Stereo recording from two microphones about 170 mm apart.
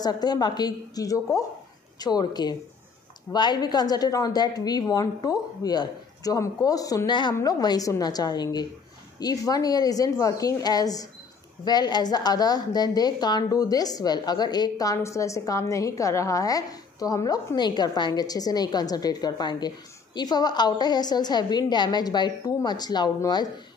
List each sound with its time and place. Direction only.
0.0 s a woman's voice: 25° left (ahead or behind)